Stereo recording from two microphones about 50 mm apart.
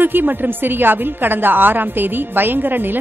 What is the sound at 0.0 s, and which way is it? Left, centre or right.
A woman's voice, right.